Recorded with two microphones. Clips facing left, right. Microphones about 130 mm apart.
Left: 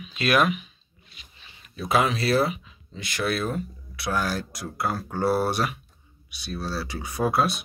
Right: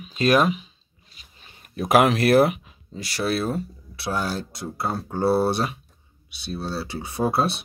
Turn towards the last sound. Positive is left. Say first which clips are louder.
# right 1 dB
turn(degrees=-30)  # may be behind; listen again after turning